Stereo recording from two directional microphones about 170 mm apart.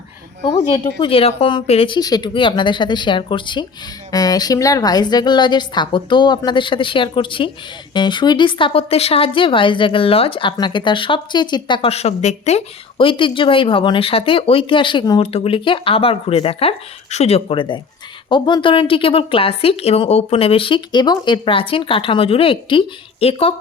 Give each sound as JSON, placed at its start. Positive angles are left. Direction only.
{"t": 0.7, "sound": "speech", "side_deg": 30}
{"t": 2.0, "sound": "a woman's voice", "side_deg": 25}